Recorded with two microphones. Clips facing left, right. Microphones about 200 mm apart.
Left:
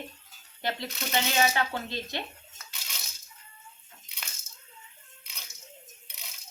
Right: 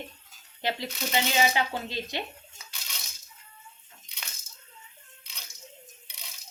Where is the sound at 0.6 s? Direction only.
15° right (ahead or behind).